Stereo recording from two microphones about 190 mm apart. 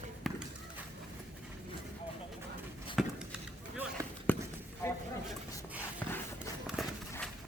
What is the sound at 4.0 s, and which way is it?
Basketball bounce, 15° right (ahead or behind).